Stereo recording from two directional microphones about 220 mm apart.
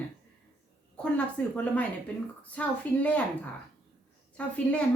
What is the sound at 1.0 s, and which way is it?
A woman's voice, 5° left (ahead or behind).